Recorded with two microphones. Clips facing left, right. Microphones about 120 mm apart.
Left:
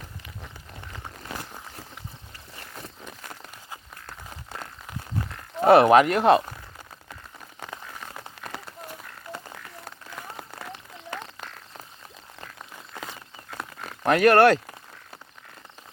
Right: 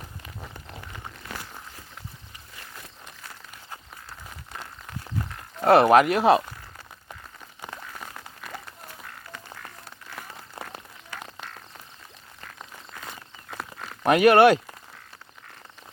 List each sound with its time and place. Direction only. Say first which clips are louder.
5.6 s speech: left 1 dB; centre (ahead or behind)
10.5 s run: right 5 dB; 65° left (ahead or behind)
13.6 s a sound: even; 10° right (ahead or behind)